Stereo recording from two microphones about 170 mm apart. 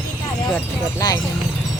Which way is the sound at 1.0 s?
20° left (ahead or behind).